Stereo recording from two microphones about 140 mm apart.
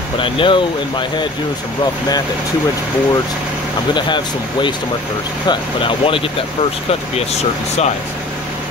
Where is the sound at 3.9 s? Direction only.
35° left (ahead or behind).